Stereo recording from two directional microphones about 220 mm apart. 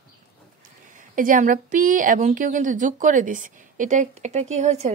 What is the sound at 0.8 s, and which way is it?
A woman's voice, 35° right (ahead or behind).